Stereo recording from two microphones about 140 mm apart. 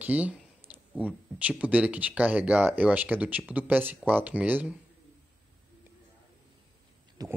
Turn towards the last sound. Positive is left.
turn(degrees=-25)  # may be behind; listen again after turning